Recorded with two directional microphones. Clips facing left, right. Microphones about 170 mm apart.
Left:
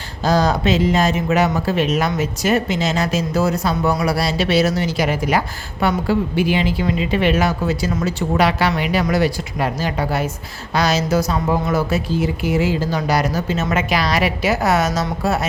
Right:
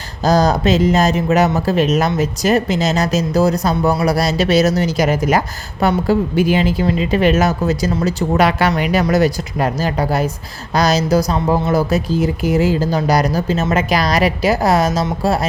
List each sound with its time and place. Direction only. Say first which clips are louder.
0.3 s speech: right 3 dB; 40° right (ahead or behind)